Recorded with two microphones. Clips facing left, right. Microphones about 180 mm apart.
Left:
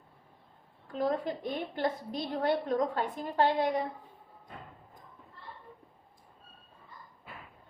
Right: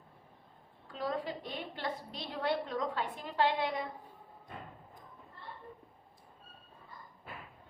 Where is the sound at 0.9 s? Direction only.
50° left (ahead or behind).